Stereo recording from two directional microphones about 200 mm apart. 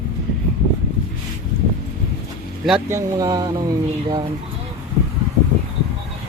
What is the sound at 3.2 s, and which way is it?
Speech, 20° right (ahead or behind).